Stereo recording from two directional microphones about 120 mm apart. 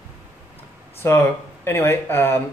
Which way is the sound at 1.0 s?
20° left (ahead or behind).